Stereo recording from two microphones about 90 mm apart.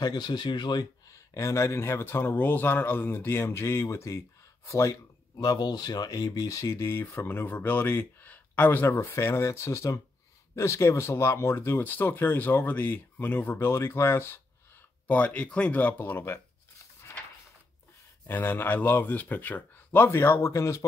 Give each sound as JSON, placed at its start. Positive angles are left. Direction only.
{"t": 0.0, "sound": "speech", "side_deg": 50}
{"t": 1.1, "sound": "speech", "side_deg": 35}
{"t": 5.4, "sound": "speech", "side_deg": 45}
{"t": 15.0, "sound": "speech", "side_deg": 15}
{"t": 18.2, "sound": "speech", "side_deg": 20}